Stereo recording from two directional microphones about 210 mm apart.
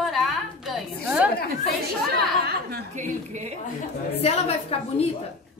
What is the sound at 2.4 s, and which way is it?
Speech, 50° right (ahead or behind).